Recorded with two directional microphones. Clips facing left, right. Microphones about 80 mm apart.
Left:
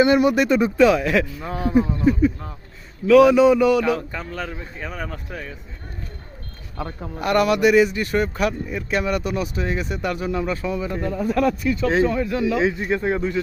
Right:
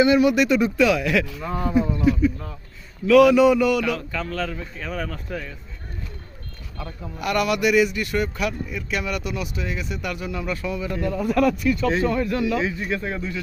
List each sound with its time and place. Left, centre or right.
0.0 s speech: left
1.4 s speech: centre
2.0 s a sound: left
3.1 s a man's voice: left
6.7 s speech: left
12.0 s speech: centre
12.8 s a man's voice: left